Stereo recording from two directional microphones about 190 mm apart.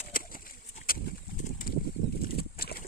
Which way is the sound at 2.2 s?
55° left (ahead or behind).